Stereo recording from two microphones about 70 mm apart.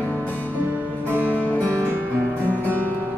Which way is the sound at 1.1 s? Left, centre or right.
Right.